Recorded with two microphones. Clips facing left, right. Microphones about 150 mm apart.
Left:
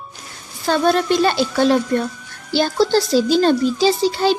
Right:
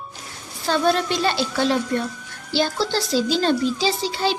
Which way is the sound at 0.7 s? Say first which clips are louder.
Left 4 dB; 50° left (ahead or behind).